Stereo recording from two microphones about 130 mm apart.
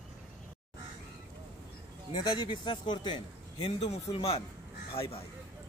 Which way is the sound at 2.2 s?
35° left (ahead or behind).